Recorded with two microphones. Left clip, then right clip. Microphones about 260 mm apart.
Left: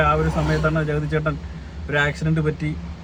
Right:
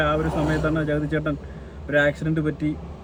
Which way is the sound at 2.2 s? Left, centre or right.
Left.